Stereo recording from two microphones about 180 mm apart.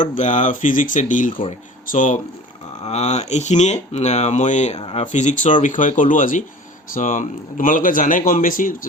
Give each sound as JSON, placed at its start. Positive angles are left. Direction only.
{"t": 0.0, "sound": "a man's voice", "side_deg": 45}